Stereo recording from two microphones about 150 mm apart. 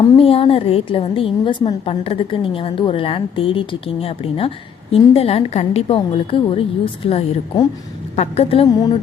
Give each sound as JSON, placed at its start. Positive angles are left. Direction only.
{"t": 0.2, "sound": "a woman's voice", "side_deg": 40}
{"t": 8.6, "sound": "speech", "side_deg": 30}